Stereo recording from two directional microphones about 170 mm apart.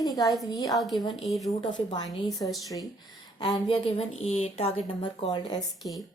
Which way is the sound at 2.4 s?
25° left (ahead or behind).